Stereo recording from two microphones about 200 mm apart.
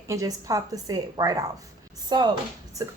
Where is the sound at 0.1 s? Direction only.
15° right (ahead or behind).